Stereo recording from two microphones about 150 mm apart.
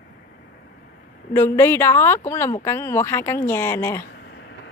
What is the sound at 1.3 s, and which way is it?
A woman's voice, 15° left (ahead or behind).